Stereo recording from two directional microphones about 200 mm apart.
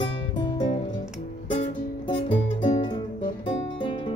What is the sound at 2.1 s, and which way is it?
Music, 25° left (ahead or behind).